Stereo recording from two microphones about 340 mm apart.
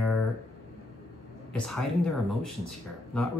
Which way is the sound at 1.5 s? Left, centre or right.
Centre.